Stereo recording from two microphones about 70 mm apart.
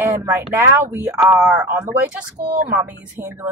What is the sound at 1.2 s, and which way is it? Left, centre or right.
Speech, centre.